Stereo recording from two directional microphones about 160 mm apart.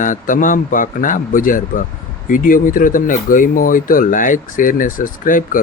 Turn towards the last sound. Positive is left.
turn(degrees=60)  # may be behind; listen again after turning